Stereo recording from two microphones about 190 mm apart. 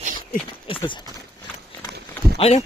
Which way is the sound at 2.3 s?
30° left (ahead or behind).